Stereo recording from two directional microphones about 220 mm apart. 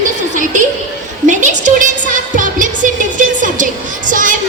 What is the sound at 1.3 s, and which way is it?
Music, 35° right (ahead or behind).